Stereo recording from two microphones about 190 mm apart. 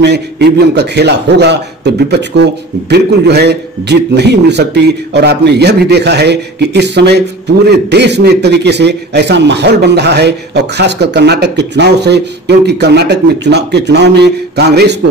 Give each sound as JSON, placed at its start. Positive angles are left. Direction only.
{"t": 0.0, "sound": "a man's voice", "side_deg": -60}